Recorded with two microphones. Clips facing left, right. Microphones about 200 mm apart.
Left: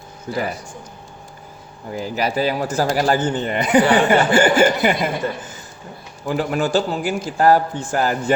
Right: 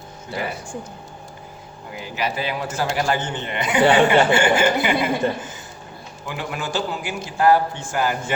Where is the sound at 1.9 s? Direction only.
40° left (ahead or behind).